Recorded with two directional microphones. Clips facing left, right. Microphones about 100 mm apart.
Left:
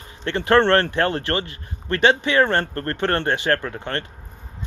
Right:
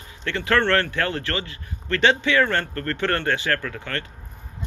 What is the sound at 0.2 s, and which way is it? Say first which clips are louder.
Speech: left 5 dB; 25° left (ahead or behind).